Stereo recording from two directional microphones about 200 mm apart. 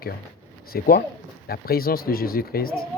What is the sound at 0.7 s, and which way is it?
Speech, 50° left (ahead or behind).